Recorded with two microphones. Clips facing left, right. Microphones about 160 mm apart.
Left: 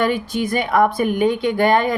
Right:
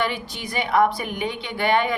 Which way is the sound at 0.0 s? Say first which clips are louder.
Left 7 dB; 45° left (ahead or behind).